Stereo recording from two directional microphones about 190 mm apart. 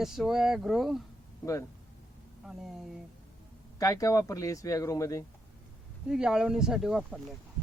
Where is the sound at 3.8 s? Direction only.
15° left (ahead or behind).